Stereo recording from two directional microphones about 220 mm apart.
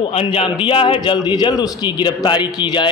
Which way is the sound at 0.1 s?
25° left (ahead or behind).